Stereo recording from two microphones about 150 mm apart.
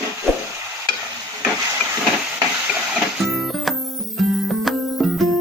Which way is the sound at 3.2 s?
Centre (ahead or behind).